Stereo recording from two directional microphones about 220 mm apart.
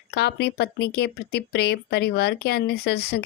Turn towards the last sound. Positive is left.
turn(degrees=50)  # may be behind; listen again after turning